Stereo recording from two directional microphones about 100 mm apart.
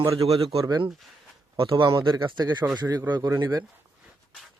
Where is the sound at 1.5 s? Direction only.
60° right (ahead or behind).